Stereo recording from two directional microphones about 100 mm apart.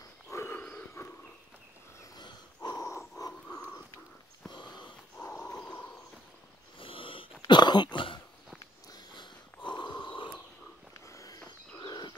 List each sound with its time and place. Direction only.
0.3 s wild animals: 25° left (ahead or behind)
2.1 s a sound: 45° left (ahead or behind)
3.4 s pig: 15° left (ahead or behind)
4.5 s sniff: 45° left (ahead or behind)
5.1 s dog: 15° left (ahead or behind)
6.8 s snoring: 60° left (ahead or behind)
7.4 s dog: 45° left (ahead or behind)
8.9 s snoring: 50° left (ahead or behind)
11.1 s a sound: 35° left (ahead or behind)